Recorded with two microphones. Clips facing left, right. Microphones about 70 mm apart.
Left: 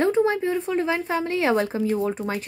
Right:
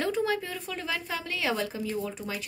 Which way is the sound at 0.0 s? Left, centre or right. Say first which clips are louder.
Left 8 dB; left.